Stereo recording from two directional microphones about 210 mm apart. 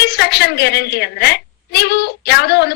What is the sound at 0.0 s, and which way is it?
A woman's voice, 50° left (ahead or behind).